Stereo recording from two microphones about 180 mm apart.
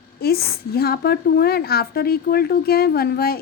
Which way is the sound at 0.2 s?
60° left (ahead or behind).